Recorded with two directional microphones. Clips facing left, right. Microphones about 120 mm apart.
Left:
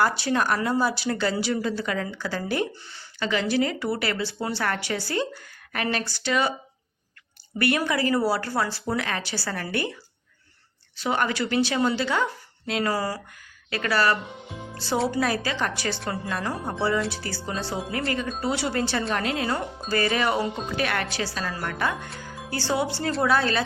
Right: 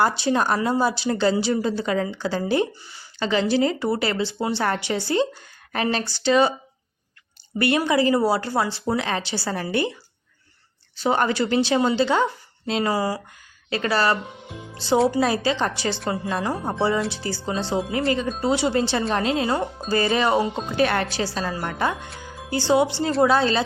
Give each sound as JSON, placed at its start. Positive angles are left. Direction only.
{"t": 0.0, "sound": "a woman's voice", "side_deg": -25}
{"t": 7.6, "sound": "a woman's voice", "side_deg": -20}
{"t": 10.9, "sound": "a woman's voice", "side_deg": -35}
{"t": 13.7, "sound": "a woman's voice", "side_deg": -25}